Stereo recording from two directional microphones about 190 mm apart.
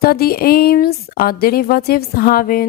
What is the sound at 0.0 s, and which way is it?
Speech, 50° left (ahead or behind).